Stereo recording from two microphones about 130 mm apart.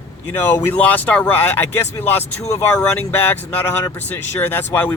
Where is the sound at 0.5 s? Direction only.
15° left (ahead or behind).